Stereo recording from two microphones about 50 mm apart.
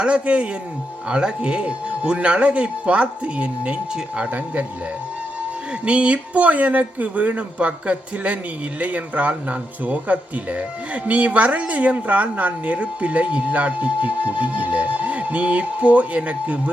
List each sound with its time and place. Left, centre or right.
0.0 s speech: right
5.8 s speech: right